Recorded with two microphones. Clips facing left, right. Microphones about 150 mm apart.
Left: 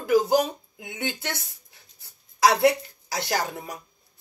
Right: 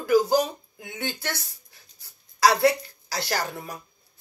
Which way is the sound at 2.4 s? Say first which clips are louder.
Left 1 dB; 20° left (ahead or behind).